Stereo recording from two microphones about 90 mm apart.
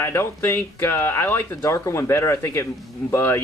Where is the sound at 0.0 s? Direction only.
25° left (ahead or behind).